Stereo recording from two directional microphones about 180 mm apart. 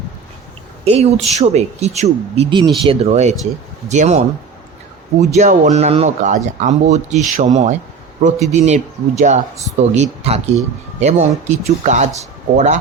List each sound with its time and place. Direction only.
0.9 s speech: 35° right (ahead or behind)
5.2 s speech: 40° right (ahead or behind)